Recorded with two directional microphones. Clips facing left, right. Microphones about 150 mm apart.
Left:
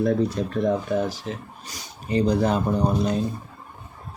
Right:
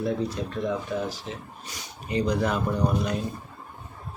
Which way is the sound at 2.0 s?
30° left (ahead or behind).